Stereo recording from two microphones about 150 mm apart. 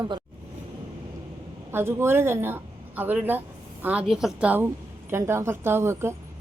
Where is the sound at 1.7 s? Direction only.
15° right (ahead or behind).